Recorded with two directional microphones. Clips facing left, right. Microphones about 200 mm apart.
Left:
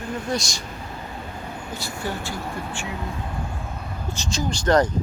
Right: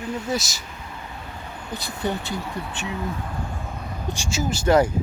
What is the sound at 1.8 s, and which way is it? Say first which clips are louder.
Speech: right 4 dB; 20° right (ahead or behind).